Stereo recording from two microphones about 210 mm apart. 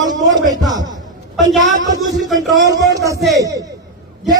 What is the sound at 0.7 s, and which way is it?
Speech, 15° right (ahead or behind).